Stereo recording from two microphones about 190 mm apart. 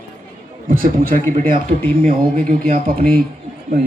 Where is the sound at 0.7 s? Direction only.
45° right (ahead or behind).